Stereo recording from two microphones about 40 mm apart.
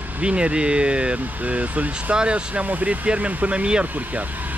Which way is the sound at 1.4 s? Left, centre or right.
Right.